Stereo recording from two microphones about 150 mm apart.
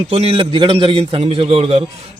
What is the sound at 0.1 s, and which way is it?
A man's voice, 40° right (ahead or behind).